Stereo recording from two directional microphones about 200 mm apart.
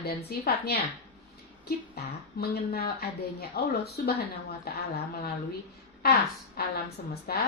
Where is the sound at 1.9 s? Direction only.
50° left (ahead or behind).